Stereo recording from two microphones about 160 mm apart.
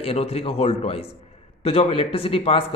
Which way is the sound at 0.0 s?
40° left (ahead or behind).